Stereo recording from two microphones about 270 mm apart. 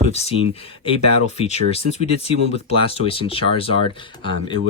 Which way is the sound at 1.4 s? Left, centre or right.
Left.